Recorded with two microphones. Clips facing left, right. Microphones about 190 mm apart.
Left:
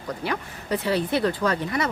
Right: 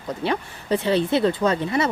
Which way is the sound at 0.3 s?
25° right (ahead or behind).